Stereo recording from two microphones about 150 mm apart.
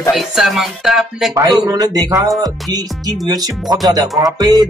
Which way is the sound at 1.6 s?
25° right (ahead or behind).